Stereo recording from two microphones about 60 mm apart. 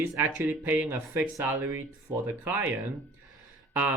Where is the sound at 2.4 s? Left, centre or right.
Right.